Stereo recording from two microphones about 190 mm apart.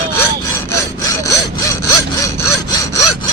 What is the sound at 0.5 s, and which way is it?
Sawing, 15° left (ahead or behind).